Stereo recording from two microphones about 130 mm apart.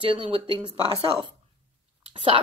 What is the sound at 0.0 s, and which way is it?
Speech, 45° right (ahead or behind).